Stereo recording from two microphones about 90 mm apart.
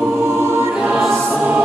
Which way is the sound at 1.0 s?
5° left (ahead or behind).